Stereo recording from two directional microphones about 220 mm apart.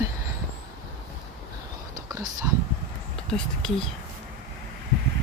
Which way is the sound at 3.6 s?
5° left (ahead or behind).